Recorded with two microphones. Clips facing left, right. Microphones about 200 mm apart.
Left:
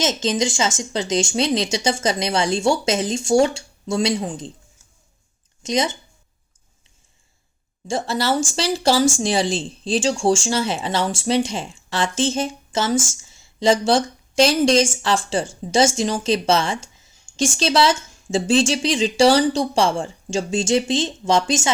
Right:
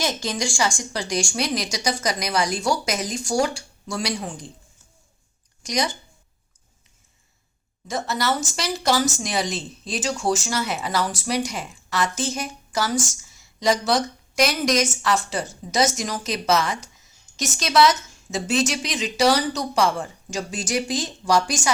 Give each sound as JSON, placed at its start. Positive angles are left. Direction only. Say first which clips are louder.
{"t": 0.0, "sound": "speech", "louder": "left 5 dB", "side_deg": 20}
{"t": 5.6, "sound": "speech", "louder": "left 4 dB", "side_deg": 25}
{"t": 7.9, "sound": "speech", "louder": "left 3 dB", "side_deg": 30}